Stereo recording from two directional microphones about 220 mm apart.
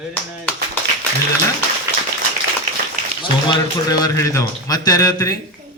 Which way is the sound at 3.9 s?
15° left (ahead or behind).